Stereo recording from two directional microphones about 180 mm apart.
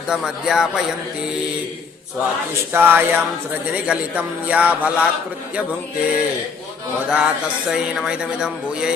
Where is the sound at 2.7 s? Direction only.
10° right (ahead or behind).